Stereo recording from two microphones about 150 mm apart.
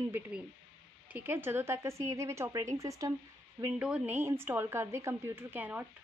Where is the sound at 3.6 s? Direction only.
5° right (ahead or behind).